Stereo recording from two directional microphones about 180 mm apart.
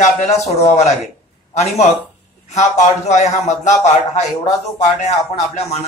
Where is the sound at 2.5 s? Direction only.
40° left (ahead or behind).